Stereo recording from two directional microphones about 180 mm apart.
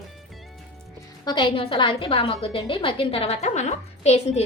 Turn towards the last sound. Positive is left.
turn(degrees=35)  # may be behind; listen again after turning